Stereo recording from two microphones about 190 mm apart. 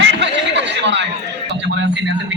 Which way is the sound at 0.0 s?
70° right (ahead or behind).